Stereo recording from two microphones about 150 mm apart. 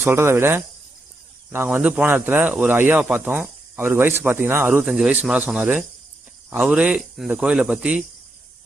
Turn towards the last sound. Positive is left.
turn(degrees=-5)  # may be behind; listen again after turning